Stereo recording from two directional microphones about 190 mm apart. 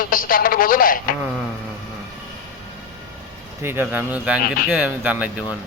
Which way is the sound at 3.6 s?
10° right (ahead or behind).